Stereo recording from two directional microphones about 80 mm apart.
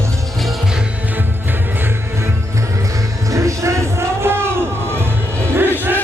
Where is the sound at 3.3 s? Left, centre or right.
Right.